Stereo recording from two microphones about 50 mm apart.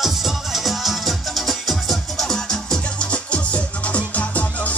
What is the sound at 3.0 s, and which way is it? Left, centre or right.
Music, left.